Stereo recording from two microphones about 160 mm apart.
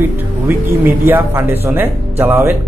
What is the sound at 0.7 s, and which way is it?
Speech, 10° right (ahead or behind).